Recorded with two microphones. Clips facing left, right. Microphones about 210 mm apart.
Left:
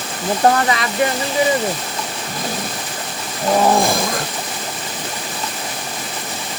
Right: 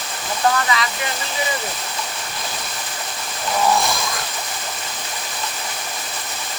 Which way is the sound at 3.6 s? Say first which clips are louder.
Left 3 dB; 50° left (ahead or behind).